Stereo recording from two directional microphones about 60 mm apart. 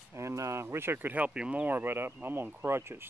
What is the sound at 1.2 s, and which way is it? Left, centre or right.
Speech, right.